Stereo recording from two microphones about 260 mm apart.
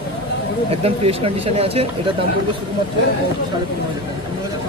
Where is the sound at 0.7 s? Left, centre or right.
Right.